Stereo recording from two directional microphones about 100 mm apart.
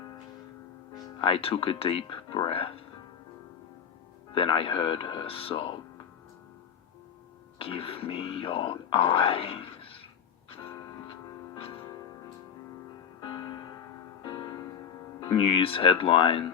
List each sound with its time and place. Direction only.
1.2 s speech: 70° left (ahead or behind)
4.4 s speech: 65° left (ahead or behind)
7.6 s speech: 65° left (ahead or behind)
14.3 s music: 40° left (ahead or behind)
15.3 s speech: 60° left (ahead or behind)